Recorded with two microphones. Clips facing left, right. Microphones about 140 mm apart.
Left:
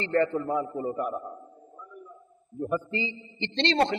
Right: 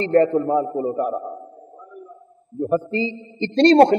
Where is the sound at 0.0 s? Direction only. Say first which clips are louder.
Right 9 dB; 35° right (ahead or behind).